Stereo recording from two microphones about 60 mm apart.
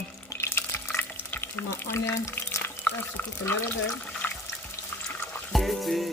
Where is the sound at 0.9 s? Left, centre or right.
Left.